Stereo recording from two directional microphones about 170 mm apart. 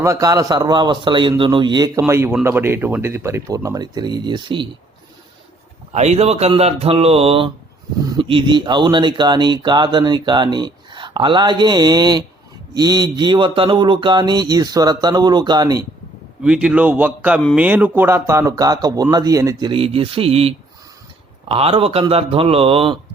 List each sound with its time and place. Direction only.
0.0 s speech: 20° right (ahead or behind)
5.9 s speech: 40° right (ahead or behind); by 15.9 s 20° right (ahead or behind)
16.4 s speech: 5° right (ahead or behind); by 20.5 s 35° right (ahead or behind)
21.5 s speech: 35° right (ahead or behind)